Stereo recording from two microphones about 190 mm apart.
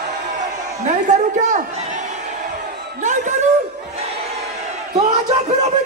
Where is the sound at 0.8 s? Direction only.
40° right (ahead or behind).